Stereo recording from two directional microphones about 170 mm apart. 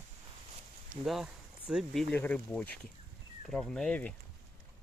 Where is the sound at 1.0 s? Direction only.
5° right (ahead or behind).